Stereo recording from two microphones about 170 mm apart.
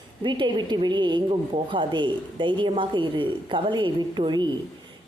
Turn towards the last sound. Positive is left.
turn(degrees=-25)  # may be behind; listen again after turning